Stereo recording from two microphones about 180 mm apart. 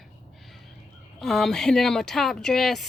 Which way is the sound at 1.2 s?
Centre (ahead or behind).